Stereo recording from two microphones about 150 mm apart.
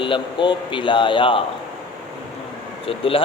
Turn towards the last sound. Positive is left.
turn(degrees=40)  # may be behind; listen again after turning